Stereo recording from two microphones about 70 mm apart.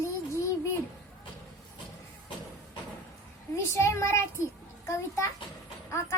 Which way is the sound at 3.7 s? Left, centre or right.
Left.